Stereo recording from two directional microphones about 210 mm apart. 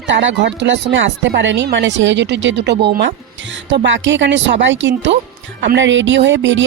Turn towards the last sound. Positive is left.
turn(degrees=-60)  # may be behind; listen again after turning